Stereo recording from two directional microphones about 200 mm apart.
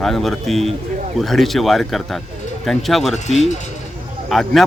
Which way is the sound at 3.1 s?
35° left (ahead or behind).